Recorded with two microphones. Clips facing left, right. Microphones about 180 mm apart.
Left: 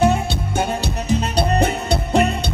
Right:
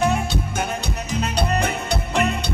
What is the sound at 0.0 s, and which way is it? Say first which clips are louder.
Music: left 4 dB; 30° left (ahead or behind).